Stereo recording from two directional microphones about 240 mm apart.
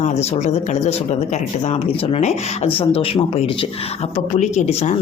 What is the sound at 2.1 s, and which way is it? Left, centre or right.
Speech, left.